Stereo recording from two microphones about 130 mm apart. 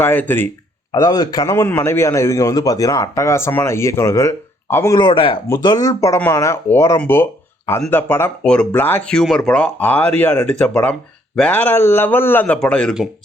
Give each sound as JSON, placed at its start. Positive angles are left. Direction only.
{"t": 0.0, "sound": "speech", "side_deg": 15}
{"t": 0.9, "sound": "a man's voice", "side_deg": 25}
{"t": 4.9, "sound": "speech", "side_deg": 40}
{"t": 5.6, "sound": "a man's voice", "side_deg": 25}